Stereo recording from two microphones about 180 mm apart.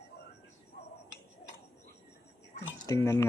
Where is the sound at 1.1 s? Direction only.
90° left.